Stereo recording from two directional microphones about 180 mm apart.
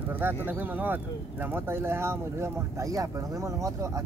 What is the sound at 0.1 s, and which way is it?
Speech, 10° right (ahead or behind).